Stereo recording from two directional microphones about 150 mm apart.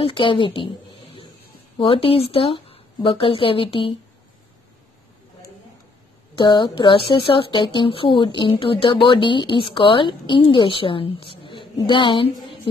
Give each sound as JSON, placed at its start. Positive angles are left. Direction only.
{"t": 0.0, "sound": "a woman's voice", "side_deg": 35}
{"t": 6.3, "sound": "speech", "side_deg": 30}